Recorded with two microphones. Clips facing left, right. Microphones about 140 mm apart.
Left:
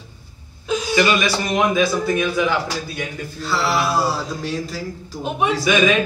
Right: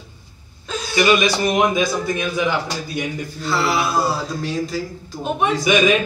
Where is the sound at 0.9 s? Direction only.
15° right (ahead or behind).